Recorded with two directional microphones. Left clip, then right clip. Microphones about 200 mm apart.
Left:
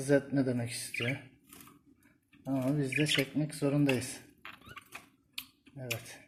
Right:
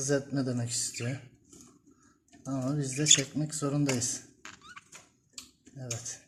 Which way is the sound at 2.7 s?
5° right (ahead or behind).